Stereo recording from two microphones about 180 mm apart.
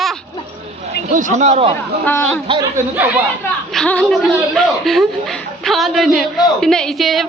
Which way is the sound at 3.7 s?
5° left (ahead or behind).